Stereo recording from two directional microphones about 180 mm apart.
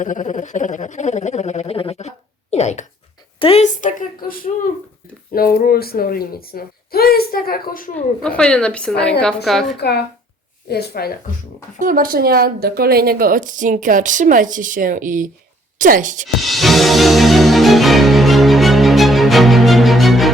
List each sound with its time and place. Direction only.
0.0 s a sound: 45° left (ahead or behind)
3.3 s a child's voice: 30° left (ahead or behind); by 8.0 s 50° left (ahead or behind)
8.2 s a woman's voice: 5° left (ahead or behind)
10.7 s a child's voice: 65° left (ahead or behind)
11.8 s a woman's voice: 50° right (ahead or behind)
16.4 s music: centre (ahead or behind)